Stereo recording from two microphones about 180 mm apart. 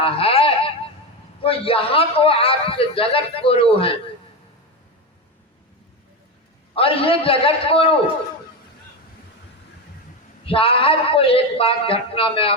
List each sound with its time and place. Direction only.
0.0 s a sound: 30° left (ahead or behind)
1.4 s a man's voice: 30° left (ahead or behind)
6.7 s a man's voice: 30° left (ahead or behind)
10.4 s a man's voice: 30° left (ahead or behind)